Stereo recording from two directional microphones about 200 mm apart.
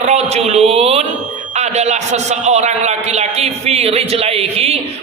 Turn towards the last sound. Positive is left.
turn(degrees=-30)  # may be behind; listen again after turning